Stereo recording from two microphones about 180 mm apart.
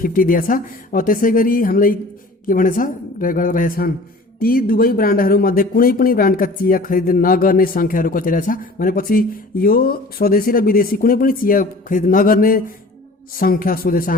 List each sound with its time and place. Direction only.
0.0 s speech: 50° left (ahead or behind)